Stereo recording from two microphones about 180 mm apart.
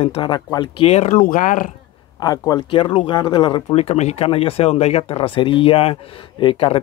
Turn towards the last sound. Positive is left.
turn(degrees=30)  # may be behind; listen again after turning